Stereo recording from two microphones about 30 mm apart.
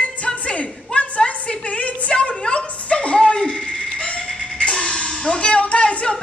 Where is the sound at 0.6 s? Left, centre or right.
Left.